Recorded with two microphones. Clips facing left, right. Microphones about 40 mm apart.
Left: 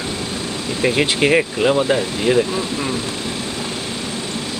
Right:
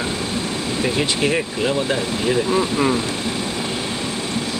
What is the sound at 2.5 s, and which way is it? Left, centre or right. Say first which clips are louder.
Speech: right 4 dB; centre.